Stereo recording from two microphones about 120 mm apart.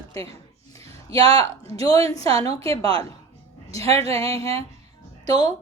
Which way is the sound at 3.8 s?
55° right (ahead or behind).